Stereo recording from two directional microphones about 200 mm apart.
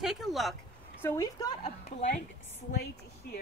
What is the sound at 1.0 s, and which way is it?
Speech, 15° left (ahead or behind).